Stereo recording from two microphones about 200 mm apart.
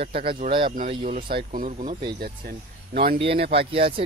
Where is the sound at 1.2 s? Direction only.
45° right (ahead or behind).